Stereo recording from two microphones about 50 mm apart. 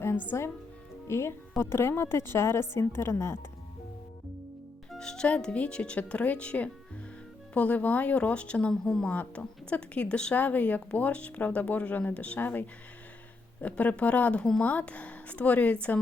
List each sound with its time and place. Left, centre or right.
0.3 s speech: left
1.0 s a woman's voice: left
4.9 s a woman's voice: centre
8.7 s a woman's voice: centre
9.0 s a woman's voice: left
10.3 s a woman's voice: left